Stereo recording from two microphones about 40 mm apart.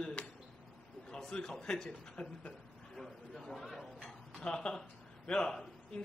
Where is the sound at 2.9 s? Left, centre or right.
Centre.